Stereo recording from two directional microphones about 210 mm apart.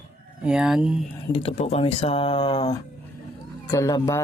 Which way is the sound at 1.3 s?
30° left (ahead or behind).